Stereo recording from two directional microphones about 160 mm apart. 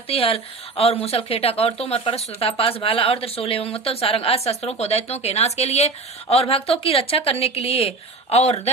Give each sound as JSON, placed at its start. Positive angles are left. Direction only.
{"t": 0.1, "sound": "a woman's voice", "side_deg": 35}